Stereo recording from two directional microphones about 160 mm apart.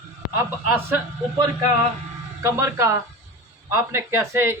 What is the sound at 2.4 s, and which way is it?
Speech, 20° right (ahead or behind).